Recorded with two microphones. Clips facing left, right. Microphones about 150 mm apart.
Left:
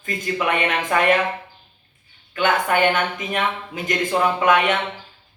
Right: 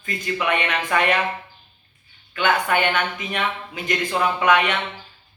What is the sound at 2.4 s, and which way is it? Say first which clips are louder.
A man's voice: left 2 dB; 45° left (ahead or behind).